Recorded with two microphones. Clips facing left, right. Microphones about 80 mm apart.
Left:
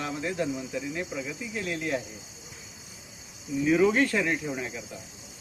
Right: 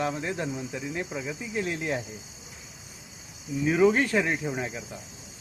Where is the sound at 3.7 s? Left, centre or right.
Centre.